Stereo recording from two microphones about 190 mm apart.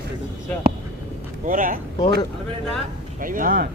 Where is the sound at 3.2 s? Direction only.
45° right (ahead or behind).